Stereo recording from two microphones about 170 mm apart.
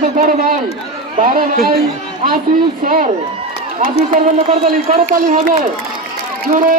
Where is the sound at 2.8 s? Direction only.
55° right (ahead or behind).